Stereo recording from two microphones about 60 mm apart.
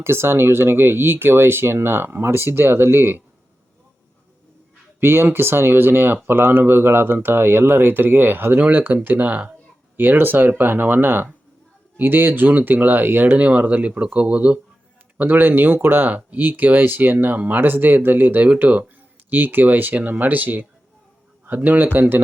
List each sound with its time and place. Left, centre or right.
0.0 s speech: right
4.9 s speech: right